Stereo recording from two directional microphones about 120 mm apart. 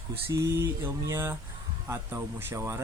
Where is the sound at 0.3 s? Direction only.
20° right (ahead or behind).